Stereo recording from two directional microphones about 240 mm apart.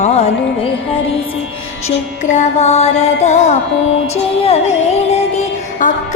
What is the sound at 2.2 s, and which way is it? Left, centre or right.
Music, left.